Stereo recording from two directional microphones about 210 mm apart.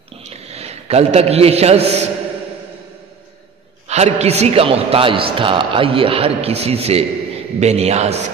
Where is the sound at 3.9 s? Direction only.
30° right (ahead or behind).